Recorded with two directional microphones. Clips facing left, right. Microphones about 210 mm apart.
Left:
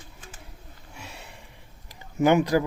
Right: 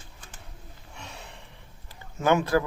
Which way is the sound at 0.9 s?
5° left (ahead or behind).